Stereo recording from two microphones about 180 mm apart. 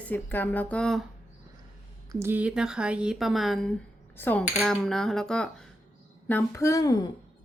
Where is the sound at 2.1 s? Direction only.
15° right (ahead or behind); by 7.1 s 20° left (ahead or behind).